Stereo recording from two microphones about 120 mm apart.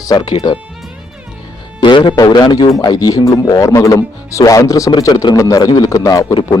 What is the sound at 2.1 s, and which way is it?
Speech, 35° left (ahead or behind).